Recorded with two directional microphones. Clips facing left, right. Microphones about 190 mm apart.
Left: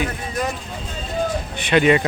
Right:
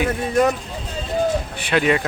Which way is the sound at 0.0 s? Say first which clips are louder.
Right 7 dB; 55° right (ahead or behind).